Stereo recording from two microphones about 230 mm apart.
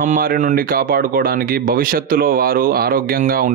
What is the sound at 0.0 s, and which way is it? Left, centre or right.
Speech, right.